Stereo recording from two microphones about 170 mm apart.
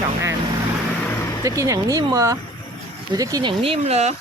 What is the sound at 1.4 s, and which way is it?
Speech, 20° right (ahead or behind).